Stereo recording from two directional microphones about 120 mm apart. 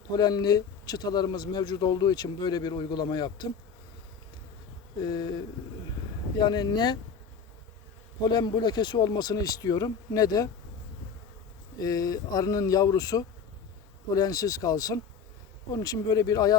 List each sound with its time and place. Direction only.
0.1 s a man's voice: 35° left (ahead or behind)
5.0 s a man's voice: 35° left (ahead or behind)
6.3 s a man's voice: 35° left (ahead or behind)
8.2 s a man's voice: 40° left (ahead or behind)
11.8 s a man's voice: 30° left (ahead or behind)